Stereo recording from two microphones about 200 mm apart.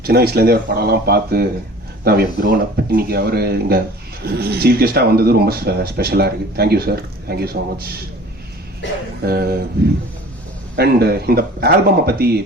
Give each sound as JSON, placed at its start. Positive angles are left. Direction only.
{"t": 0.0, "sound": "speech", "side_deg": -50}
{"t": 9.2, "sound": "speech", "side_deg": -50}
{"t": 10.8, "sound": "speech", "side_deg": -50}